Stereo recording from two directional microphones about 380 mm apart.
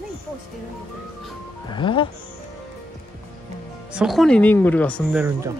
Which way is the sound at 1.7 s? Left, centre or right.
Centre.